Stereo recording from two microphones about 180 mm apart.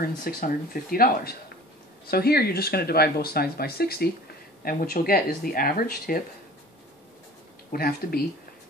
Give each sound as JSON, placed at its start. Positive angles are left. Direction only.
{"t": 0.0, "sound": "speech", "side_deg": 55}
{"t": 7.7, "sound": "speech", "side_deg": 55}